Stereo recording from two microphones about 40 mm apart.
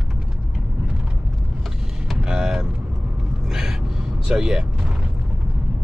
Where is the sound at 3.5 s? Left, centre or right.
Centre.